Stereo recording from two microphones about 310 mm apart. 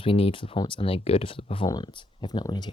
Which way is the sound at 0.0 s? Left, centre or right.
Centre.